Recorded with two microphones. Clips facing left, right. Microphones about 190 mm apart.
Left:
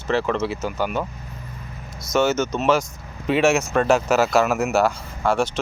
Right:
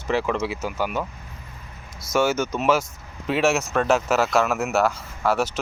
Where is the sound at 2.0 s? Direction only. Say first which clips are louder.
Left 2 dB; 10° right (ahead or behind).